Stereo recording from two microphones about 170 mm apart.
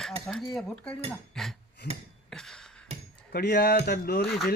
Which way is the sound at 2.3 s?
5° left (ahead or behind).